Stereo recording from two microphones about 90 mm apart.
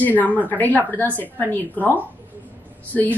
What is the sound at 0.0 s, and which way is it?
Speech, 20° left (ahead or behind).